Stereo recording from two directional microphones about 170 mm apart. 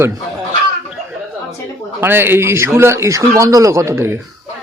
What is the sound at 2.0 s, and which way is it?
A man's voice, 10° right (ahead or behind).